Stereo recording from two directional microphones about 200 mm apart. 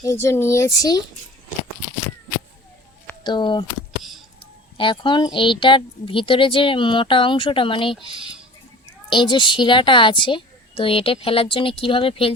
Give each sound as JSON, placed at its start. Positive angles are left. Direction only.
{"t": 0.0, "sound": "speech", "side_deg": 15}
{"t": 3.2, "sound": "a woman's voice", "side_deg": 20}
{"t": 4.8, "sound": "a woman's voice", "side_deg": 25}
{"t": 9.0, "sound": "a woman's voice", "side_deg": 25}